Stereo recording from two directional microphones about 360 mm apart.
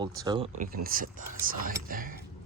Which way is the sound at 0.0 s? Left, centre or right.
Centre.